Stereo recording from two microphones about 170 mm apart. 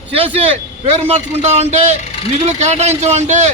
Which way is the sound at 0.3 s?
35° right (ahead or behind).